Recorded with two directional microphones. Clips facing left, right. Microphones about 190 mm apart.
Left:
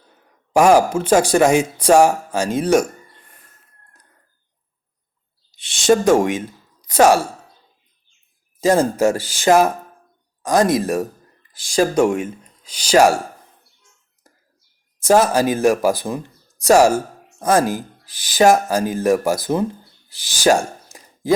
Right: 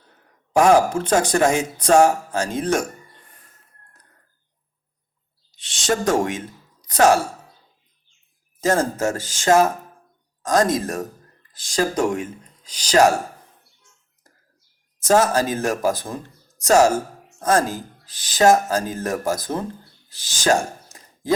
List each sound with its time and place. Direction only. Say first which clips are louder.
0.5 s speech: left 2 dB; 10° left (ahead or behind)
5.5 s a sound: left 8 dB; 10° left (ahead or behind)
8.6 s speech: left 5 dB; 10° left (ahead or behind)
11.9 s speech: left 5 dB; 25° left (ahead or behind)
12.6 s speech: left 3 dB; 10° left (ahead or behind)
14.9 s speech: left 3 dB; 10° left (ahead or behind)
20.1 s a sound: left 4 dB; 10° left (ahead or behind)